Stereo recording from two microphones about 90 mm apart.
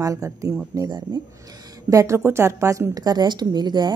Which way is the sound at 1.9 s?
35° right (ahead or behind).